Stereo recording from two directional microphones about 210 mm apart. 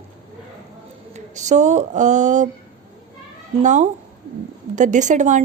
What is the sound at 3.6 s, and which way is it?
A woman's voice, 35° right (ahead or behind).